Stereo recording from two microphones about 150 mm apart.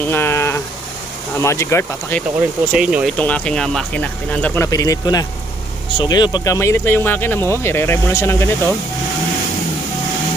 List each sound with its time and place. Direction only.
0.1 s a sound: 15° left (ahead or behind)
1.4 s speech: 20° left (ahead or behind)
2.7 s speech: 5° right (ahead or behind)
3.2 s speech: 10° left (ahead or behind)
4.6 s speech: 25° left (ahead or behind)